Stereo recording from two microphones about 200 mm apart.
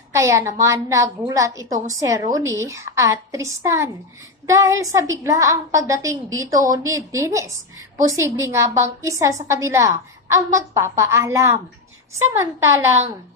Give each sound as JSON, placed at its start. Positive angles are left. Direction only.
{"t": 0.1, "sound": "a woman's voice", "side_deg": -15}
{"t": 12.6, "sound": "a woman's voice", "side_deg": -15}